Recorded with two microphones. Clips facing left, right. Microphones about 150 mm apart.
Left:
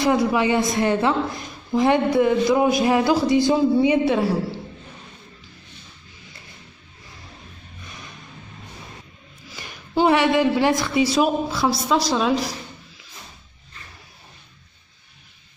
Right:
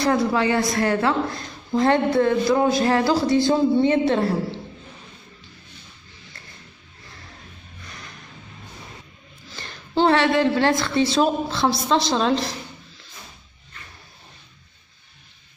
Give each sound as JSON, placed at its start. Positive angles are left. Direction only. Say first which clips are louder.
{"t": 0.0, "sound": "a woman's voice", "louder": "left 1 dB", "side_deg": 15}
{"t": 7.8, "sound": "a sound", "louder": "left 1 dB", "side_deg": 20}
{"t": 9.6, "sound": "a woman's voice", "louder": "even", "side_deg": 10}